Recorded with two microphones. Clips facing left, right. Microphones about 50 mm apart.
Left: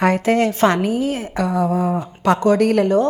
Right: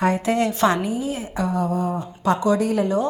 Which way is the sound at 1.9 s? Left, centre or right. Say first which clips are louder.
Left 4 dB; left.